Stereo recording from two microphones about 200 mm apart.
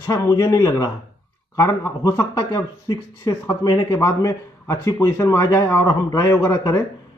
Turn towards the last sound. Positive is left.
turn(degrees=15)  # may be behind; listen again after turning